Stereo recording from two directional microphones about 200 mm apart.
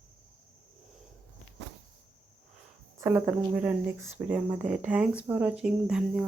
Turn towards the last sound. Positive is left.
turn(degrees=-5)  # may be behind; listen again after turning